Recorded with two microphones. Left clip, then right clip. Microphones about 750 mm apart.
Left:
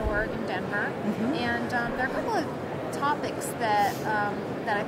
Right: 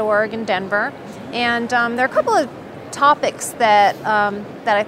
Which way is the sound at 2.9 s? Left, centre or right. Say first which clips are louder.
Right 14 dB; right.